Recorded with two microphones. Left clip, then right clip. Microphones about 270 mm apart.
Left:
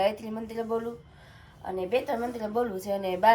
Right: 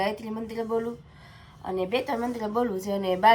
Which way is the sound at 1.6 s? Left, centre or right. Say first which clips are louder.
Right 1 dB; centre.